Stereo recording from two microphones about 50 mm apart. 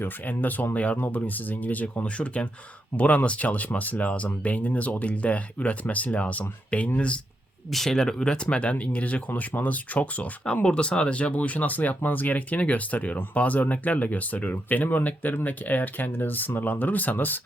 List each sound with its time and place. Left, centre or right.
0.0 s speech: left
7.7 s speech: centre; by 17.4 s left